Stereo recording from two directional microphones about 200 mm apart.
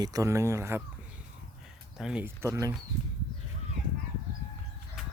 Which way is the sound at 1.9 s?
5° right (ahead or behind).